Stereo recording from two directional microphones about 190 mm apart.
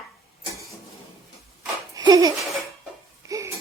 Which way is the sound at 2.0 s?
20° right (ahead or behind).